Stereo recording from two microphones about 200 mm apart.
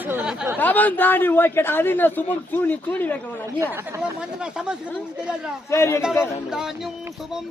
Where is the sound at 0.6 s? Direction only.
10° left (ahead or behind).